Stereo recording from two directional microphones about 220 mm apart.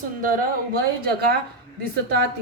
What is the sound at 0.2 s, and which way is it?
Speech, 40° right (ahead or behind).